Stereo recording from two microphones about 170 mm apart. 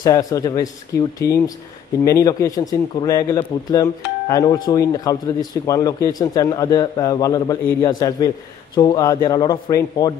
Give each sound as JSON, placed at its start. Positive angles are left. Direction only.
{"t": 0.0, "sound": "a man's voice", "side_deg": 20}